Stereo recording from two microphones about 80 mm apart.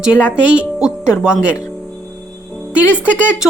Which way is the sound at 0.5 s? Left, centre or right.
Centre.